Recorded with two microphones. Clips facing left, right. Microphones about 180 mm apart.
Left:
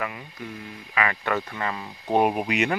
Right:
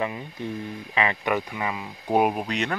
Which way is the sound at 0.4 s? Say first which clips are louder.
Right 6 dB; 25° right (ahead or behind).